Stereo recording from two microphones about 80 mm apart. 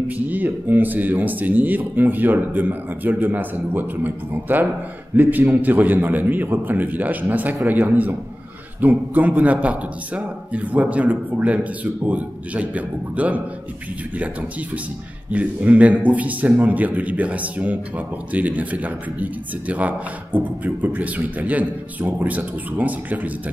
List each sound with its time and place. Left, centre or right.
0.3 s a man's voice: right
15.3 s a man's voice: centre
20.3 s a man's voice: right